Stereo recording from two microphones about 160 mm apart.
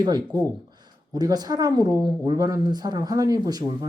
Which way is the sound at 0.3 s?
10° left (ahead or behind).